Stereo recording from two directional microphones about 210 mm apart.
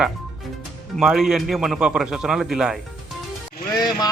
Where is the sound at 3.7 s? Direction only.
20° left (ahead or behind).